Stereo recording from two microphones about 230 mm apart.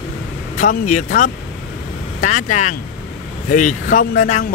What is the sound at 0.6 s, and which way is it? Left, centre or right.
A man's voice, left.